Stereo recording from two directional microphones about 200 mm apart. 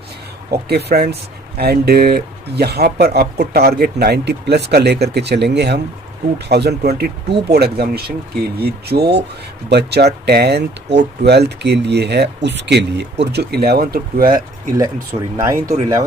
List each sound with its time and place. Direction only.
0.5 s speech: 55° right (ahead or behind)
15.1 s speech: 30° right (ahead or behind)
15.4 s speech: 15° right (ahead or behind)